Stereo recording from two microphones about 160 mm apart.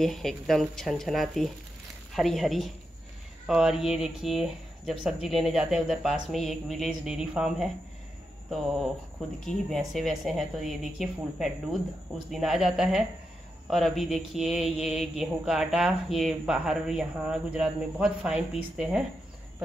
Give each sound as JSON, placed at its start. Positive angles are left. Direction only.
{"t": 0.0, "sound": "mantra", "side_deg": 0}
{"t": 9.4, "sound": "mantra", "side_deg": 0}